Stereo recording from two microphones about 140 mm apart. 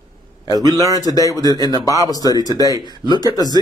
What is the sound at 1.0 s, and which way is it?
Speech, 25° left (ahead or behind).